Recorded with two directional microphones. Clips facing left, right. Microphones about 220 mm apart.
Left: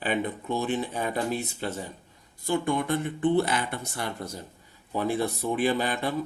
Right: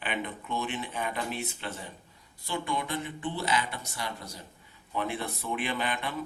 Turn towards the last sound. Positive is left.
turn(degrees=40)  # may be behind; listen again after turning